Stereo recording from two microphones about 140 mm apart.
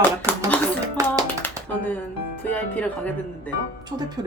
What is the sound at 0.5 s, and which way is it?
Speech, 10° left (ahead or behind).